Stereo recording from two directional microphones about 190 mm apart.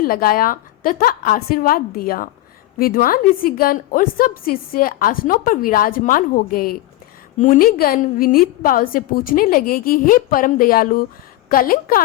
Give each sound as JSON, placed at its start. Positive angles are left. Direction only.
{"t": 0.0, "sound": "a woman's voice", "side_deg": 50}